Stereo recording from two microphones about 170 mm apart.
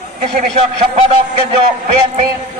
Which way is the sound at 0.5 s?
35° right (ahead or behind).